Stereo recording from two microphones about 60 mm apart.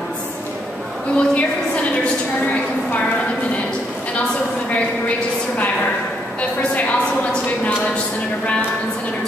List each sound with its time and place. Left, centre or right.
1.1 s a woman's voice: left
4.6 s a woman's voice: left